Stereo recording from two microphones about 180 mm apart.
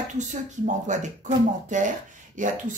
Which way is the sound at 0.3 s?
40° right (ahead or behind).